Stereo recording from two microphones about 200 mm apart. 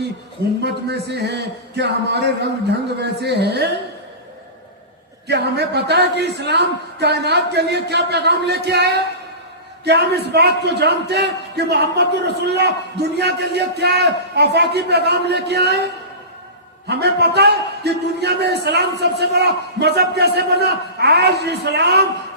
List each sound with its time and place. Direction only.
0.6 s a man's voice: 55° right (ahead or behind)
5.3 s a man's voice: 55° right (ahead or behind)
16.9 s a man's voice: 55° right (ahead or behind)